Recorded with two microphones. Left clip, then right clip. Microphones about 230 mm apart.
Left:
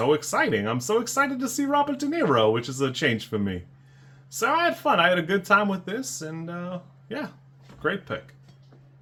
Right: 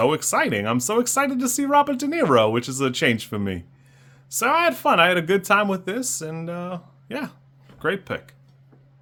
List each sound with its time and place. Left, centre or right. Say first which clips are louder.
0.0 s speech: right 2 dB; right